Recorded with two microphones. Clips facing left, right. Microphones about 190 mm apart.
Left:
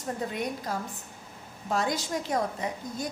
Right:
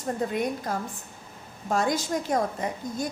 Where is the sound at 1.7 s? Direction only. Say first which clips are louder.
Right 3 dB; 45° right (ahead or behind).